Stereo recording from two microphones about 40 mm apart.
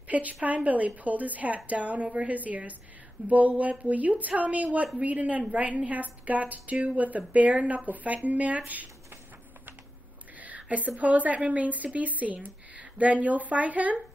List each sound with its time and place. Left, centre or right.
0.1 s a woman's voice: right
10.4 s a sound: right
11.0 s a woman's voice: right